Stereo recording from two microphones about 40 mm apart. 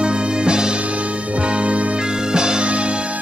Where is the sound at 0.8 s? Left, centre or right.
Right.